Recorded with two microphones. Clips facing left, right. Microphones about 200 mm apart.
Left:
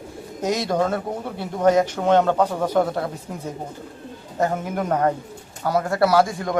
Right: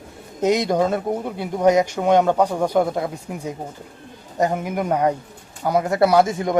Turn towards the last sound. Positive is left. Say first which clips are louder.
# right 2 dB
turn(degrees=-20)  # may be behind; listen again after turning